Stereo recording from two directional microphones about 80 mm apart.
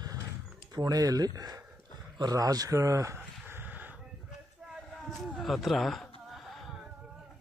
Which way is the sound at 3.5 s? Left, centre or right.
Right.